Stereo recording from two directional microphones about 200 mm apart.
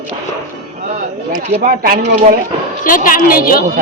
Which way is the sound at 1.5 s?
45° right (ahead or behind).